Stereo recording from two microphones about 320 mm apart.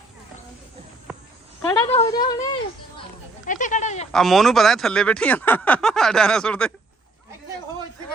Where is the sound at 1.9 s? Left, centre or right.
Centre.